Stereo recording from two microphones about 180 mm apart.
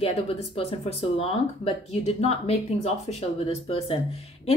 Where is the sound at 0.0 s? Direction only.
35° left (ahead or behind).